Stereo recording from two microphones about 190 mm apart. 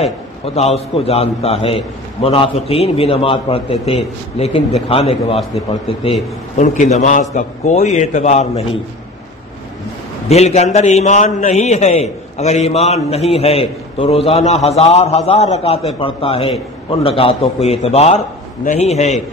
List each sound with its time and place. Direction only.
0.6 s a man's voice: 35° left (ahead or behind)
10.2 s a man's voice: 35° left (ahead or behind)